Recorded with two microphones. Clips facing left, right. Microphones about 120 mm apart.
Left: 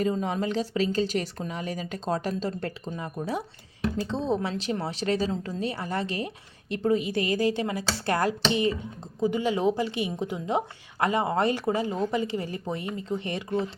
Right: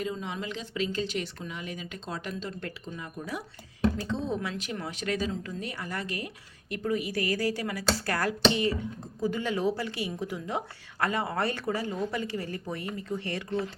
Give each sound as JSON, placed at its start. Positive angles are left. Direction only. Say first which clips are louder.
{"t": 0.0, "sound": "speech", "louder": "left 7 dB", "side_deg": 40}